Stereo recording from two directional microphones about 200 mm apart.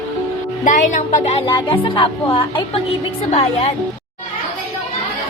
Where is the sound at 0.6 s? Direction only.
40° left (ahead or behind).